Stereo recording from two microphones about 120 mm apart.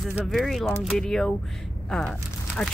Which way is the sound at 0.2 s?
Centre (ahead or behind).